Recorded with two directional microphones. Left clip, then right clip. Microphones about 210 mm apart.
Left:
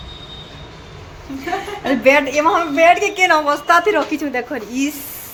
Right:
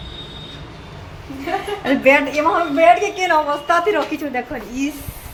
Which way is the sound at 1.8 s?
10° left (ahead or behind).